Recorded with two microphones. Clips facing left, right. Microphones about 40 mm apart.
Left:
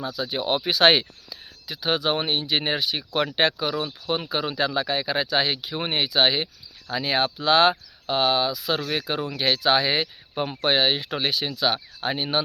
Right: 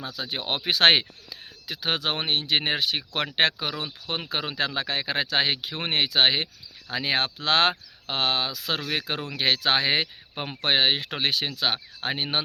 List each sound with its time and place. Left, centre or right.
0.2 s speech: right
3.3 s speech: right
10.3 s speech: right
10.7 s speech: right